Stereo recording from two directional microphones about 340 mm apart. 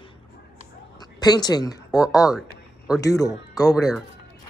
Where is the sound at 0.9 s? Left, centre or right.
Centre.